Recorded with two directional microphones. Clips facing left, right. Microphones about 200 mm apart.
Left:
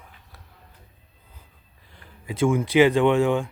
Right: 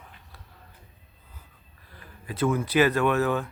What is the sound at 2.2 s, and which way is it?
Speech, 10° left (ahead or behind).